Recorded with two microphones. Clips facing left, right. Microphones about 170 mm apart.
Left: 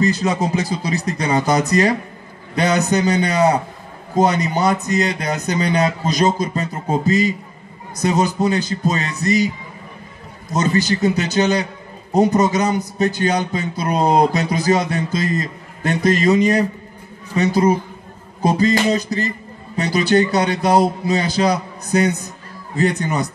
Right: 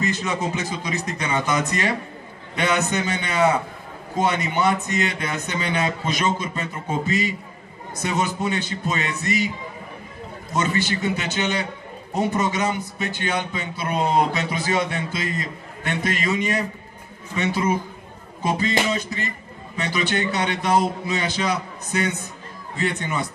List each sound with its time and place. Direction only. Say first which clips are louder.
0.0 s a man's voice: left 6 dB; 35° left (ahead or behind)
10.5 s a man's voice: left 5 dB; 40° left (ahead or behind)